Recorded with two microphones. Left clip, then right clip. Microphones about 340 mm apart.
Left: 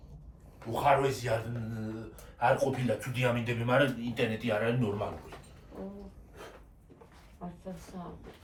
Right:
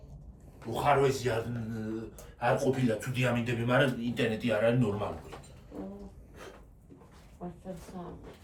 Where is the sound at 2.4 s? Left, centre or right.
Centre.